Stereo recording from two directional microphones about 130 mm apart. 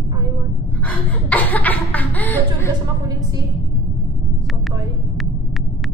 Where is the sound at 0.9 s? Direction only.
10° left (ahead or behind).